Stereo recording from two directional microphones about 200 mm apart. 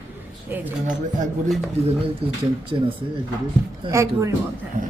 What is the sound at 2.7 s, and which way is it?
Speech, 25° right (ahead or behind).